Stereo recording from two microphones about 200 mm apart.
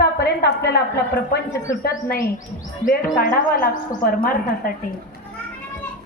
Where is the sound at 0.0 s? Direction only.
55° left (ahead or behind).